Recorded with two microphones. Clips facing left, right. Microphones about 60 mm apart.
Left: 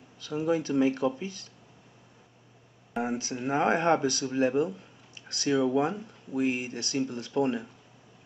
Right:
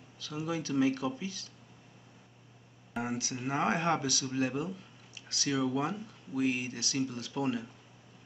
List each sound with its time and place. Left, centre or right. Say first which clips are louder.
0.2 s speech: left 8 dB; left
3.0 s speech: left 4 dB; left